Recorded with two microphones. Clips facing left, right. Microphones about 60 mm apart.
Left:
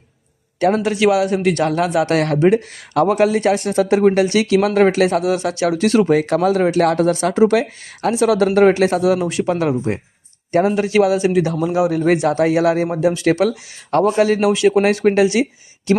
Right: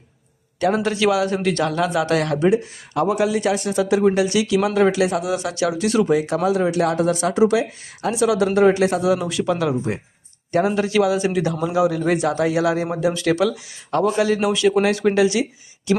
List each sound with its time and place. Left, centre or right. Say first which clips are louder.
0.8 s speech: left 3 dB; left
2.6 s speech: left 5 dB; left
3.1 s speech: left 4 dB; left
8.1 s a man's voice: left 3 dB; left
14.5 s speech: left 3 dB; left